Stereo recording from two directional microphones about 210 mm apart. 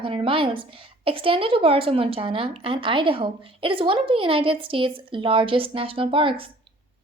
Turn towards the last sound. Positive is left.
turn(degrees=-25)  # may be behind; listen again after turning